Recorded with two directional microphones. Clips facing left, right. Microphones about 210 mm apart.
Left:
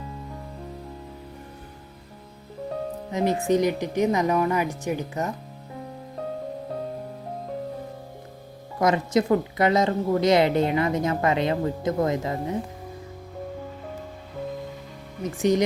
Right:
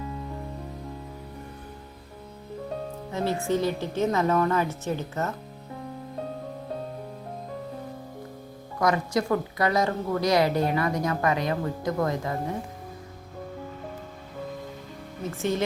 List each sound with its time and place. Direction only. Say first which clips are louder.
3.1 s speech: left 4 dB; 15° left (ahead or behind)
8.8 s a woman's voice: left 3 dB; 20° left (ahead or behind)
15.2 s speech: left 6 dB; 15° left (ahead or behind)